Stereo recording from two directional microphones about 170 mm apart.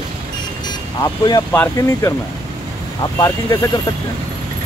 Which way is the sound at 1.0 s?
25° left (ahead or behind).